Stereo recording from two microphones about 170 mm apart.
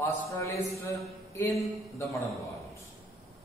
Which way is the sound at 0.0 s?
20° left (ahead or behind).